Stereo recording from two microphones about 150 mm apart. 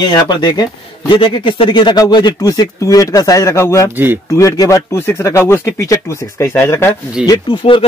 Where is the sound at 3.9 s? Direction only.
15° right (ahead or behind).